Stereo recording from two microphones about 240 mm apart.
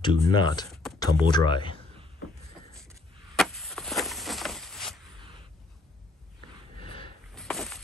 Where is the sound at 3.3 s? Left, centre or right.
Centre.